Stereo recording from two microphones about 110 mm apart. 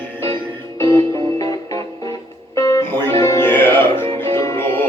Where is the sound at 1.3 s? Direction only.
35° left (ahead or behind).